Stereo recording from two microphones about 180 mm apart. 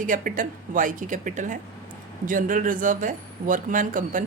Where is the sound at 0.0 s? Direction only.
50° right (ahead or behind).